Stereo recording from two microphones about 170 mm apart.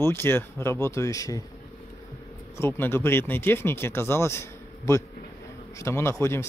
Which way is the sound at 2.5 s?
15° left (ahead or behind).